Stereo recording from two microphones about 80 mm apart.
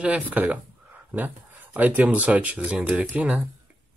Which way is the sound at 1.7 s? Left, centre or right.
Centre.